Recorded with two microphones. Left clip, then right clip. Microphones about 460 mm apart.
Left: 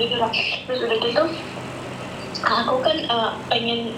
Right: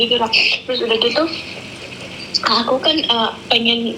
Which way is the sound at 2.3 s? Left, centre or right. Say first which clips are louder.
Right 4 dB; right.